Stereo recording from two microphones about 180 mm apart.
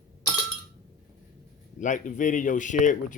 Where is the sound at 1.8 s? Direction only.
45° left (ahead or behind).